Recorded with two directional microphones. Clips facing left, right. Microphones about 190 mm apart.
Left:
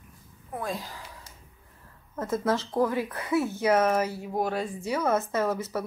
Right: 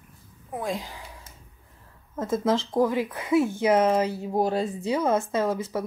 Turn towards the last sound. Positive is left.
turn(degrees=-15)  # may be behind; listen again after turning